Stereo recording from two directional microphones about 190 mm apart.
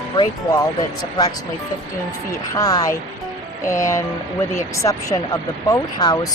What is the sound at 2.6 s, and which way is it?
Speech, 20° left (ahead or behind).